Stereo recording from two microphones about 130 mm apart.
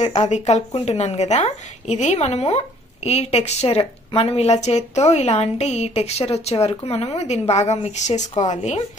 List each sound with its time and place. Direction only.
0.0 s a woman's voice: 60° left (ahead or behind)